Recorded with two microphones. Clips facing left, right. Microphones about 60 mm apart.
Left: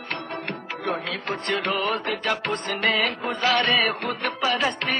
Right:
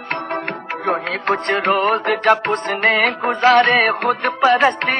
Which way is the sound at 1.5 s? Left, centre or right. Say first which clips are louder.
Right 7 dB; right.